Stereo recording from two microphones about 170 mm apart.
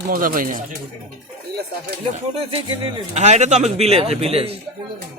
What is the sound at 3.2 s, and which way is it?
Speech, 45° right (ahead or behind).